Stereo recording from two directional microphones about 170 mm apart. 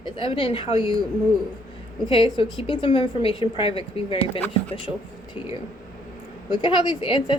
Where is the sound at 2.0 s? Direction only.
30° left (ahead or behind).